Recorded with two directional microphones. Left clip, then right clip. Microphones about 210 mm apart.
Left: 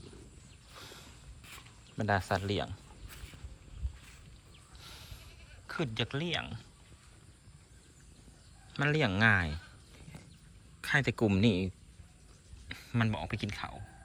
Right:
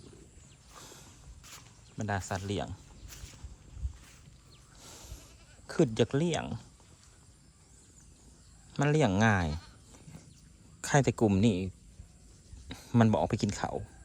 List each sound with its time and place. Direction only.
0.8 s a sound: 20° right (ahead or behind)
2.0 s speech: 10° right (ahead or behind)
4.8 s goat: 40° right (ahead or behind)
5.6 s speech: 35° right (ahead or behind)
8.7 s speech: 20° right (ahead or behind)
10.8 s speech: 30° right (ahead or behind)